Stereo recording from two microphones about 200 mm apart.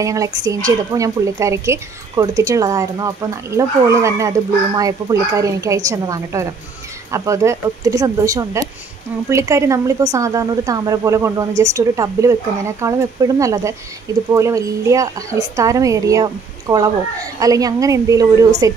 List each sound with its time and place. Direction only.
0.0 s speech: 15° right (ahead or behind)